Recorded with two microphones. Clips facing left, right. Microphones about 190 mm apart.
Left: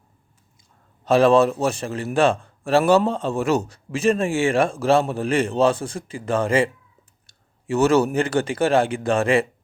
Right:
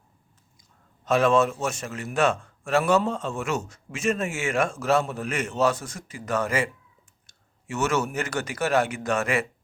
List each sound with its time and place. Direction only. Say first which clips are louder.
1.0 s speech: left 5 dB; 35° left (ahead or behind)